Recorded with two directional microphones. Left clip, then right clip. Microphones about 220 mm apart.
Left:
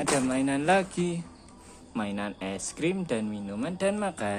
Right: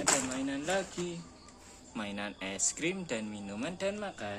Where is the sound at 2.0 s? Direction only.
15° left (ahead or behind).